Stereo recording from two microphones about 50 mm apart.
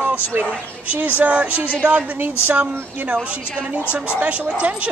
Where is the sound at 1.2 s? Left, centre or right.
Right.